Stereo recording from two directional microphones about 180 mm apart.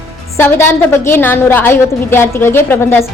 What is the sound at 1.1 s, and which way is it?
A woman's voice, 10° left (ahead or behind).